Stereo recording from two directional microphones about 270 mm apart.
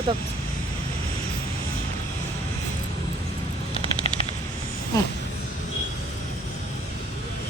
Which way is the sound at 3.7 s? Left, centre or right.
Right.